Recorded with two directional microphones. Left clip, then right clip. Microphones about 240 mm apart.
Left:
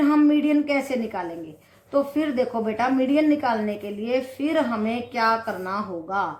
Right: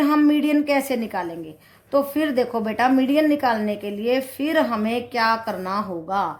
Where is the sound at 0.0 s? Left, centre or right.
Right.